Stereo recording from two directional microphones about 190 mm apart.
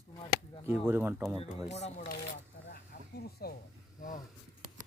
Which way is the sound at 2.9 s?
50° left (ahead or behind).